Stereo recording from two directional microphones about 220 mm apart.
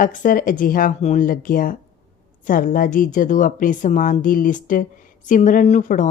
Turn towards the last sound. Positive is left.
turn(degrees=35)  # may be behind; listen again after turning